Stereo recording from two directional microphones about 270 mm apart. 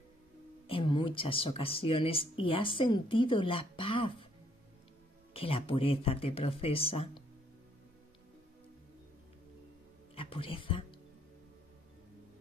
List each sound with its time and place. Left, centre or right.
0.7 s speech: centre
5.3 s speech: left
10.1 s music: centre